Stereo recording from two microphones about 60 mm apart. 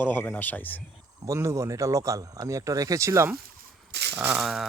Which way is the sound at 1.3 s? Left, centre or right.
Right.